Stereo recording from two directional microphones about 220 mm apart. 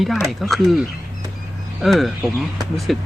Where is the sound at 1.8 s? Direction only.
Centre (ahead or behind).